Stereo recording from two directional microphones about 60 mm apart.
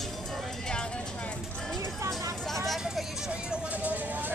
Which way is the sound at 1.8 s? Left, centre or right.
Right.